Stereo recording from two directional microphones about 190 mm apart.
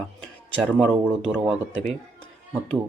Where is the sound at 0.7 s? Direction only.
5° right (ahead or behind).